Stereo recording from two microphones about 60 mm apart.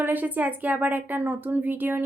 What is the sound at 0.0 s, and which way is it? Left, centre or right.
A woman's voice, right.